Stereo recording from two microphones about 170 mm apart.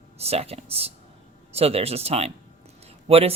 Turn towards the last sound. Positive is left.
turn(degrees=-35)  # may be behind; listen again after turning